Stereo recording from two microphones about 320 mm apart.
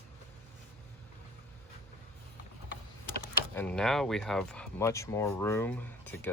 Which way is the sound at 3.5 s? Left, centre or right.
Centre.